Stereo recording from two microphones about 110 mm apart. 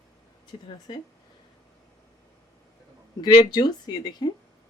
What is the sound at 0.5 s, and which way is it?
Speech, 55° left (ahead or behind).